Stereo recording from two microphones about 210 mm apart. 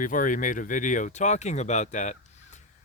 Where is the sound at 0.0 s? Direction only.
40° left (ahead or behind).